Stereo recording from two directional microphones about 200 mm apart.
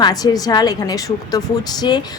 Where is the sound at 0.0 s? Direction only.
20° left (ahead or behind).